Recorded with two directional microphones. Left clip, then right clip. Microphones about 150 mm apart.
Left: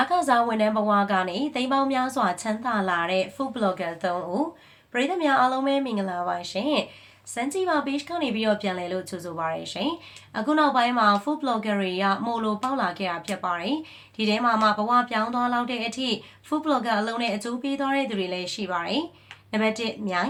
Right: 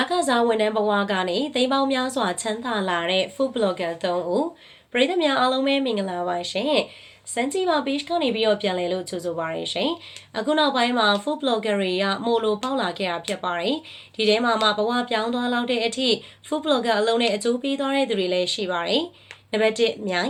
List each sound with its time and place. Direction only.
0.3 s speech: 20° right (ahead or behind)